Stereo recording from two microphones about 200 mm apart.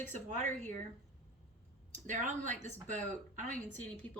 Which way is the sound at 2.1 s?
35° right (ahead or behind).